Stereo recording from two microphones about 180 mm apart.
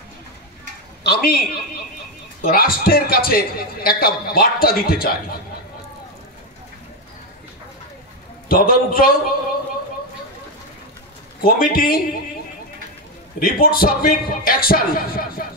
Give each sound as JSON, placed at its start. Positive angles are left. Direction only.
{"t": 1.0, "sound": "a man's voice", "side_deg": 60}
{"t": 8.5, "sound": "a man's voice", "side_deg": 55}
{"t": 11.4, "sound": "a man's voice", "side_deg": 55}
{"t": 13.4, "sound": "a man's voice", "side_deg": 55}